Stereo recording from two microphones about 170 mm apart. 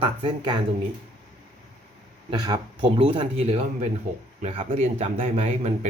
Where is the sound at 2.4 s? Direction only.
25° right (ahead or behind).